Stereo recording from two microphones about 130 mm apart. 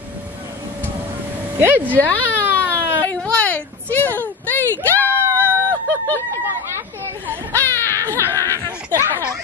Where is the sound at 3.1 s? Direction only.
10° left (ahead or behind).